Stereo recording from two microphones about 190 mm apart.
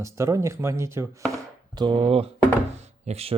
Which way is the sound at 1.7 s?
25° right (ahead or behind).